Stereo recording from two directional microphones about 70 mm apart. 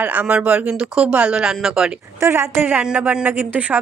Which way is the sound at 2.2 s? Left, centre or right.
Right.